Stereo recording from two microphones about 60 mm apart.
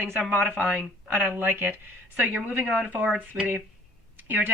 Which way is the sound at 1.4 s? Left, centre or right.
Right.